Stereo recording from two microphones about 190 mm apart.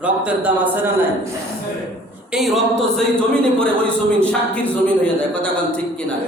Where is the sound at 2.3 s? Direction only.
Centre (ahead or behind).